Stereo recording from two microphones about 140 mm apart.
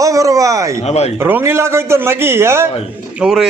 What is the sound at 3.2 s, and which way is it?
Speech, 5° right (ahead or behind).